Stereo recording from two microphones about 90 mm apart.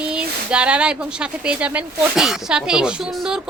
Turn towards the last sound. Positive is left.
turn(degrees=-5)  # may be behind; listen again after turning